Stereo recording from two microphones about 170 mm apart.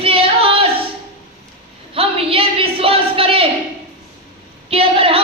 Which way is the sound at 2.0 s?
35° right (ahead or behind).